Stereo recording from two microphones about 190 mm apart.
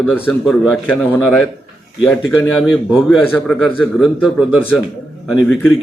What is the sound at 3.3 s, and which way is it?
Speech, 5° left (ahead or behind).